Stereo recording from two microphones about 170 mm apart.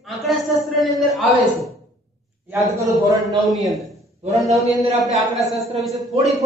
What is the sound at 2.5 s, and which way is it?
Speech, 20° right (ahead or behind).